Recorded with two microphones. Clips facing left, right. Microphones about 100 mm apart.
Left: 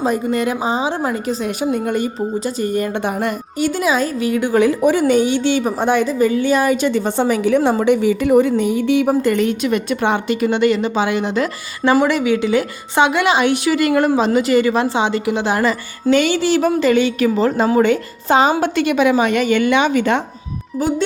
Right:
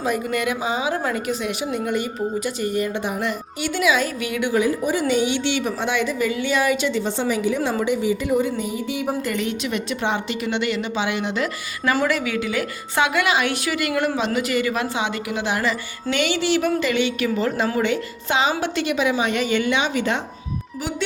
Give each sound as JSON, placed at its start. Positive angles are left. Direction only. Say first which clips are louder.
{"t": 0.0, "sound": "a woman's voice", "louder": "left 5 dB", "side_deg": 35}
{"t": 1.7, "sound": "a woman's voice", "louder": "left 5 dB", "side_deg": 45}
{"t": 4.6, "sound": "a woman's voice", "louder": "left 7 dB", "side_deg": 70}
{"t": 5.0, "sound": "a woman's voice", "louder": "left 6 dB", "side_deg": 45}
{"t": 12.0, "sound": "a woman's voice", "louder": "left 6 dB", "side_deg": 25}